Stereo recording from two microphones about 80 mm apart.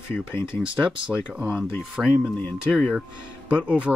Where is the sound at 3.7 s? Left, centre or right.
Centre.